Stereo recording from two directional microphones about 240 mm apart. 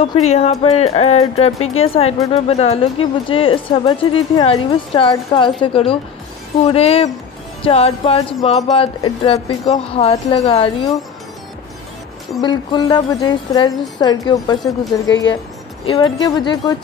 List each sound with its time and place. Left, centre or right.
0.0 s a woman's voice: left
12.4 s a woman's voice: centre
15.8 s a woman's voice: centre